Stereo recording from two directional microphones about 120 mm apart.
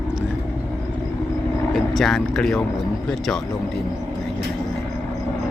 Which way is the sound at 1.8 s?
Centre (ahead or behind).